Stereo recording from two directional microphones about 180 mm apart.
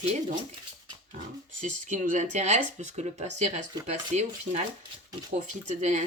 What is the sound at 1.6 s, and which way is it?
Speech, 45° right (ahead or behind).